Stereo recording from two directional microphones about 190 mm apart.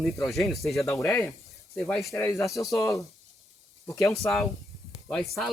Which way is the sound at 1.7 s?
Centre (ahead or behind).